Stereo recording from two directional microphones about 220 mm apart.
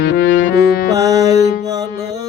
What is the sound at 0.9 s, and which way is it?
Music, 15° right (ahead or behind).